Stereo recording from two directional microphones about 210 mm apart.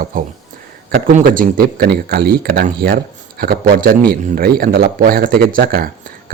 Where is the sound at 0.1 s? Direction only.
40° right (ahead or behind).